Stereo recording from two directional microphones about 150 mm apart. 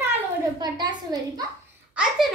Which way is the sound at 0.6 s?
30° right (ahead or behind).